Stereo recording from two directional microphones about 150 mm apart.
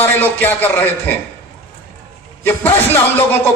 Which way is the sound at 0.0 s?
10° left (ahead or behind).